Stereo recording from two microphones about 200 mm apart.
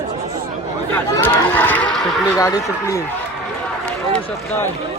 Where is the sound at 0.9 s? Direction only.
10° left (ahead or behind).